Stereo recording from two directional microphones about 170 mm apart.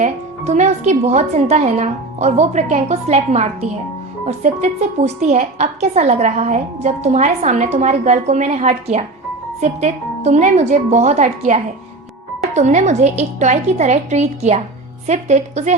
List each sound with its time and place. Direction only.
0.0 s a woman's voice: 45° right (ahead or behind)